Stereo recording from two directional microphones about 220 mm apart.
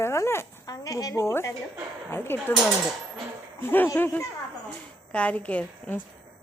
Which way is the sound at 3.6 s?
10° left (ahead or behind).